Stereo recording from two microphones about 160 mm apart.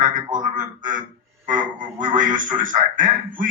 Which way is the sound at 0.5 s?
55° right (ahead or behind).